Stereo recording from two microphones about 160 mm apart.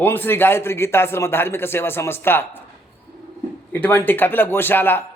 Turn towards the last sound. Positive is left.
turn(degrees=15)  # may be behind; listen again after turning